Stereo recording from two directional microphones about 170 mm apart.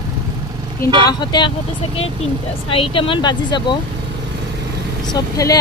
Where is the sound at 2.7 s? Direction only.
30° left (ahead or behind).